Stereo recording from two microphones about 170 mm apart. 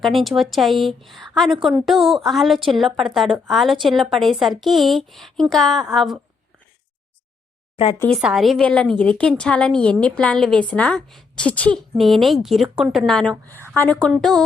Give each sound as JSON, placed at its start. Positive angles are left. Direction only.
{"t": 0.0, "sound": "a woman's voice", "side_deg": 0}
{"t": 7.8, "sound": "speech", "side_deg": 35}
{"t": 8.1, "sound": "a woman's voice", "side_deg": 0}